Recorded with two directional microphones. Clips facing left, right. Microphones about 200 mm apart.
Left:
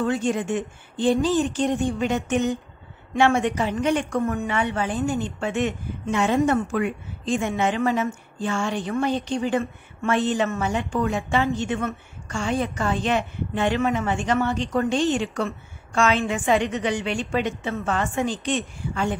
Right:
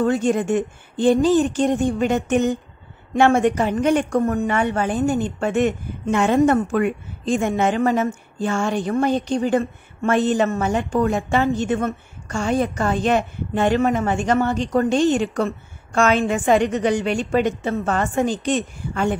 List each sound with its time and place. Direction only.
0.0 s a woman's voice: 45° right (ahead or behind)